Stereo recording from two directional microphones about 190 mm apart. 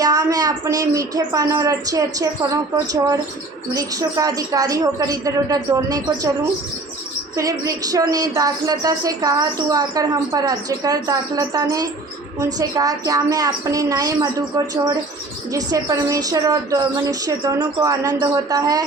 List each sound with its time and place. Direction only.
0.0 s speech: 20° right (ahead or behind)
7.3 s speech: 20° right (ahead or behind)
15.5 s speech: 20° right (ahead or behind)